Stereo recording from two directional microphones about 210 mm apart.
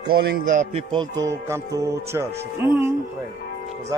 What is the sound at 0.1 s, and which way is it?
Speech, 45° right (ahead or behind).